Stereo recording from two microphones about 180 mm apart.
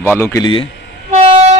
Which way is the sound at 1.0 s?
35° right (ahead or behind).